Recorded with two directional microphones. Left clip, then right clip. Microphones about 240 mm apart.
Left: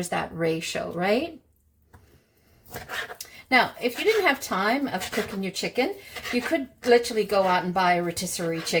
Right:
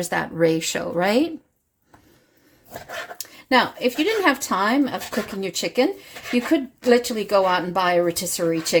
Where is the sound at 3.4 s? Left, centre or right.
Right.